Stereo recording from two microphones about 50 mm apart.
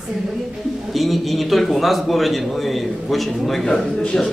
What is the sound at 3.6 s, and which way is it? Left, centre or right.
Speech, centre.